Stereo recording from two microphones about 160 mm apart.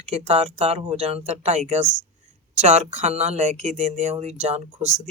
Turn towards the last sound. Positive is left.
turn(degrees=-45)  # may be behind; listen again after turning